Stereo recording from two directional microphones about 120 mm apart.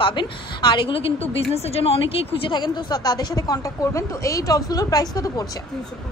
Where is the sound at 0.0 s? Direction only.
40° left (ahead or behind).